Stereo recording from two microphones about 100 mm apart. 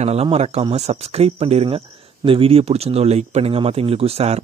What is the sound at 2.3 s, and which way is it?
Speech, 70° right (ahead or behind).